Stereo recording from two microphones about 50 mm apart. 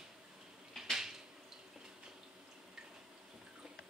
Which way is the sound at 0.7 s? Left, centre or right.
Centre.